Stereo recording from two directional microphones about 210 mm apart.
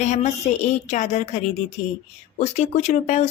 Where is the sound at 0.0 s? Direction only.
35° left (ahead or behind).